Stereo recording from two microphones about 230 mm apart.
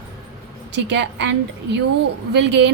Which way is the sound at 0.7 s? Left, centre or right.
Right.